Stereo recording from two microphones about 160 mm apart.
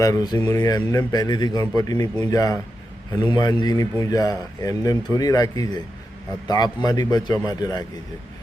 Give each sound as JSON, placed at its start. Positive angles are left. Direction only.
{"t": 0.0, "sound": "a man's voice", "side_deg": 25}